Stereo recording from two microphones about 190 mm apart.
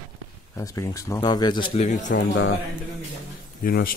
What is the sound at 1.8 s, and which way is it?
Speech, 40° left (ahead or behind).